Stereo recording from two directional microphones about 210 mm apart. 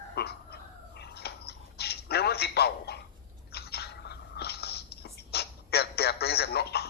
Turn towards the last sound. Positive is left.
turn(degrees=50)  # may be behind; listen again after turning